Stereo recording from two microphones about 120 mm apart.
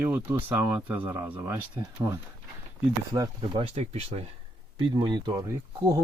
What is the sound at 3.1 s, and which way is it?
Speech, 35° right (ahead or behind).